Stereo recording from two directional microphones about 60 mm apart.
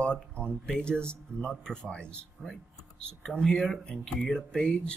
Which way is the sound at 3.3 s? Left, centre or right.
Centre.